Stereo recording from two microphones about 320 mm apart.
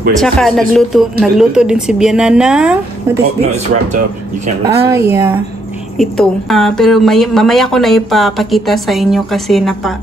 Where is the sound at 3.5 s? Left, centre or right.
Right.